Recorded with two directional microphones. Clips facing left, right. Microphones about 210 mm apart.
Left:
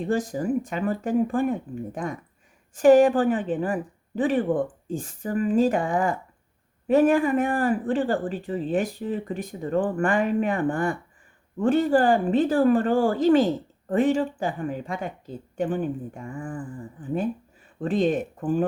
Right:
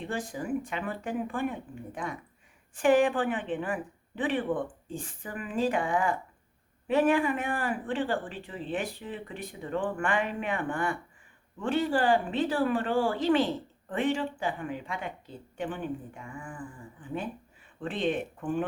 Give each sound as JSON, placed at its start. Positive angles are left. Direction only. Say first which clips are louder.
{"t": 0.0, "sound": "speech", "louder": "left 9 dB", "side_deg": 40}